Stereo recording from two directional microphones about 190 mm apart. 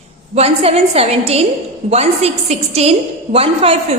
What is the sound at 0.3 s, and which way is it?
A woman's voice, 35° right (ahead or behind).